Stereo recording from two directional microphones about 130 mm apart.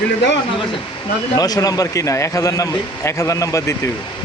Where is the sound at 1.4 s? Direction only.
30° left (ahead or behind).